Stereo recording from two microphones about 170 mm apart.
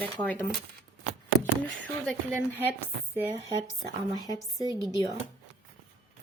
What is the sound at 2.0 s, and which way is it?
Speech, centre (ahead or behind).